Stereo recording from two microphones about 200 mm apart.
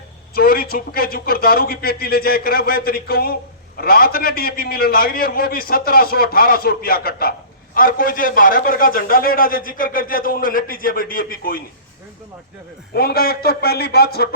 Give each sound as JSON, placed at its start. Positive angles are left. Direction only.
{"t": 0.3, "sound": "a man's voice", "side_deg": 50}
{"t": 12.9, "sound": "a man's voice", "side_deg": 50}